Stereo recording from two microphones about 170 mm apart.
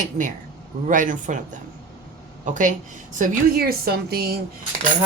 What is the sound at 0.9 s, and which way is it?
Speech, 50° right (ahead or behind).